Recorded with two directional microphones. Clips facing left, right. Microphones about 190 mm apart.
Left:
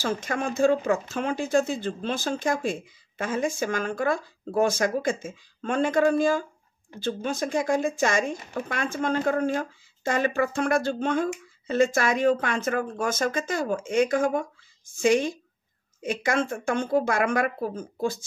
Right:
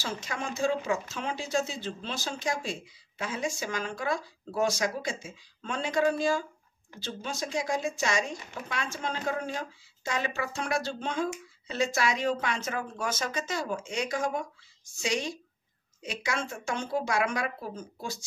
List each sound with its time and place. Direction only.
0.0 s speech: 50° left (ahead or behind)